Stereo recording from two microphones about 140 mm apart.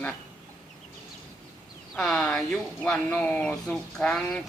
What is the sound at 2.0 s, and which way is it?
Speech, 5° left (ahead or behind).